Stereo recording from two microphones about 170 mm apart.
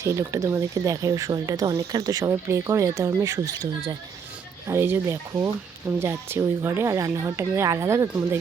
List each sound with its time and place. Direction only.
0.0 s speech: 15° right (ahead or behind)
4.7 s speech: 15° right (ahead or behind)